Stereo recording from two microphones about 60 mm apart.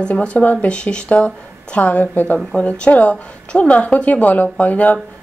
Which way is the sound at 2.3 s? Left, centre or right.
Centre.